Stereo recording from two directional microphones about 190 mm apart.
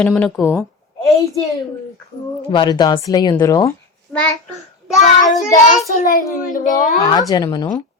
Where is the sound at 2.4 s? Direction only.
25° left (ahead or behind).